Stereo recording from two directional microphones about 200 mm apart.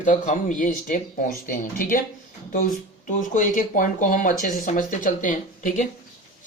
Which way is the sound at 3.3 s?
40° left (ahead or behind).